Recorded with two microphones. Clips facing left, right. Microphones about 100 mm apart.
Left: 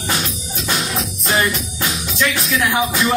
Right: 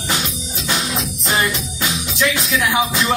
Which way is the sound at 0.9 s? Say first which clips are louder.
Left 1 dB; 15° right (ahead or behind).